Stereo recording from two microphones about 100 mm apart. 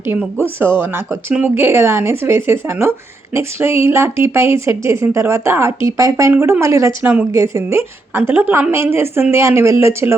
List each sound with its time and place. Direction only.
0.3 s speech: 25° right (ahead or behind)
3.8 s speech: 25° right (ahead or behind)
7.0 s speech: 15° right (ahead or behind)
7.3 s speech: 30° right (ahead or behind)